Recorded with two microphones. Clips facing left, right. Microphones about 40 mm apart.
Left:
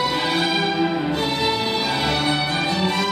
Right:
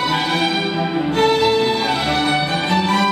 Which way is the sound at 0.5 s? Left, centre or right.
Centre.